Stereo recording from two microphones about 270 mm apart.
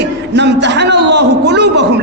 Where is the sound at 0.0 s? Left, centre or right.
Right.